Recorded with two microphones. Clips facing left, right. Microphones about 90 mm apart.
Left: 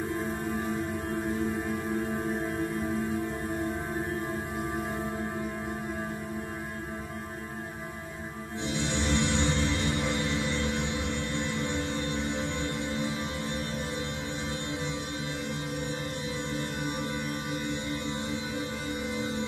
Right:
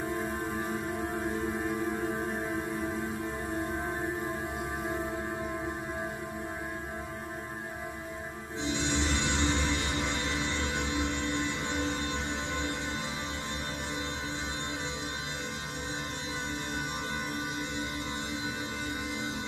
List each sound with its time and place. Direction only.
8.6 s music: 20° right (ahead or behind)